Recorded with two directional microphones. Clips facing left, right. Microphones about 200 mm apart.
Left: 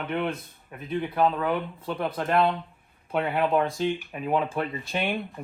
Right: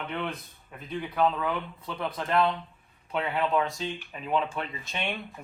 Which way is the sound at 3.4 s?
50° left (ahead or behind).